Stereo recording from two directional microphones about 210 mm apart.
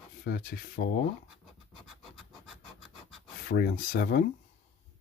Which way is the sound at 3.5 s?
45° left (ahead or behind).